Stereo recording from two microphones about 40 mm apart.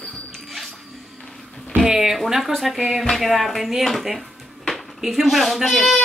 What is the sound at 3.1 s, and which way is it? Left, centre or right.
A child's voice, centre.